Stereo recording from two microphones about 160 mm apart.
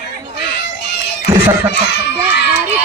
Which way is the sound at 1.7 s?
90° left.